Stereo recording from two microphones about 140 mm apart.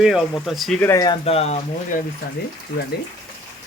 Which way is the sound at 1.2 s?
45° left (ahead or behind).